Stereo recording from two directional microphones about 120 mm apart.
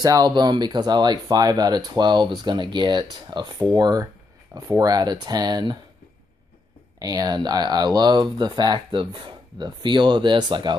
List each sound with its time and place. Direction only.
0.0 s speech: 30° right (ahead or behind)
7.0 s speech: 30° right (ahead or behind)